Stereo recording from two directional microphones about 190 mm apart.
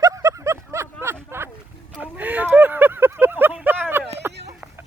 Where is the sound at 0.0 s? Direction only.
15° right (ahead or behind).